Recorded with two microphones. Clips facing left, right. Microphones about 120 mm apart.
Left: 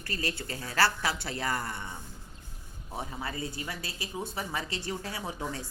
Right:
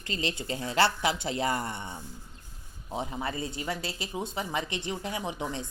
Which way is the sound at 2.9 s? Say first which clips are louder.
Right 4 dB; 25° right (ahead or behind).